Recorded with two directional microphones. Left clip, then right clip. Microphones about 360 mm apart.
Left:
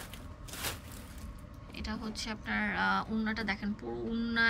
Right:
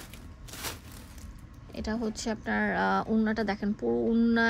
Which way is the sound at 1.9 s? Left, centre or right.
Centre.